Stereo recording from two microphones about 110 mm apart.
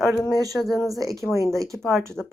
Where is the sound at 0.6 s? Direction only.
Centre (ahead or behind).